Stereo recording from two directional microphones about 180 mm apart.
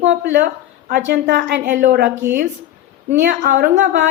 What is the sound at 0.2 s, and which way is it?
A woman's voice, 65° right (ahead or behind).